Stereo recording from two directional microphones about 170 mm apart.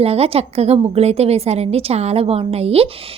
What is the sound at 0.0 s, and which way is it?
Speech, 35° right (ahead or behind).